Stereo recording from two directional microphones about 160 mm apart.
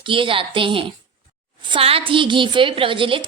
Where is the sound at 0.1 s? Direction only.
35° right (ahead or behind).